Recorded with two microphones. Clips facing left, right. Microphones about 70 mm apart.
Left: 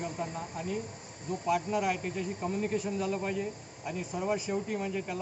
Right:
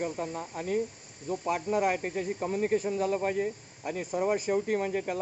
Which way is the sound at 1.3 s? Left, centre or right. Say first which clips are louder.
Right 1 dB; right.